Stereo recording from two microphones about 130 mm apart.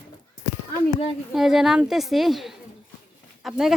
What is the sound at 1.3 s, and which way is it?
A woman's voice, 5° right (ahead or behind).